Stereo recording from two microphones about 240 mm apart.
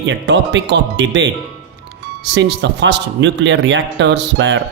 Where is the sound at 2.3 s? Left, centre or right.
Right.